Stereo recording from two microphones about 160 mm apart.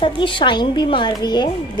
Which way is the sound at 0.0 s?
30° left (ahead or behind).